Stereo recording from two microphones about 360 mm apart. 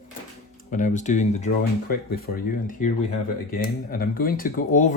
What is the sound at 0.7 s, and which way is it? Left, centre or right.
Speech, left.